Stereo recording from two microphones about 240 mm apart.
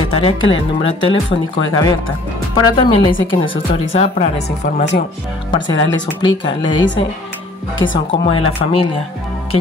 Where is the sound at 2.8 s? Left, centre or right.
Left.